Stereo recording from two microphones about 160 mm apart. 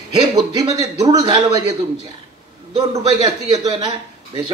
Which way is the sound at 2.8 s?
35° right (ahead or behind).